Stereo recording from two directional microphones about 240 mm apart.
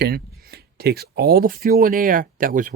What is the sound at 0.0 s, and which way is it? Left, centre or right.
Speech, right.